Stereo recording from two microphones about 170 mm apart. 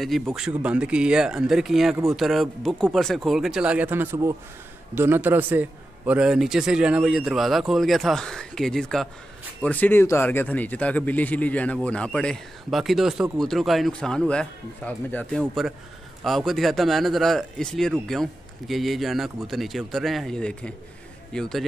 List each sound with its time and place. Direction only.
0.3 s a man's voice: 5° right (ahead or behind)